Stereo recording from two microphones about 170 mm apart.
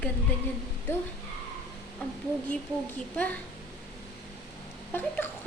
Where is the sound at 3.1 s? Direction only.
10° left (ahead or behind).